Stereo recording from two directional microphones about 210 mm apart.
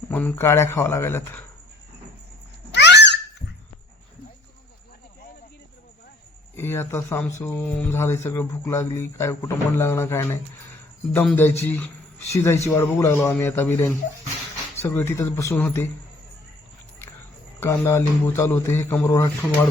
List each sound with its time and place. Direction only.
0.1 s speech: 10° left (ahead or behind)
2.7 s cat: 55° left (ahead or behind)
6.6 s speech: 10° left (ahead or behind)
17.6 s speech: 10° left (ahead or behind)